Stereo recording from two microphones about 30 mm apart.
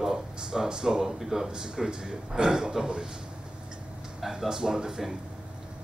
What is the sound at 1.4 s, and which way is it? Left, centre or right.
A man's voice, right.